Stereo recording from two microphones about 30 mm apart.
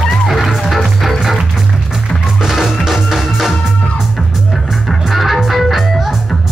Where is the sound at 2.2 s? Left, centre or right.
Centre.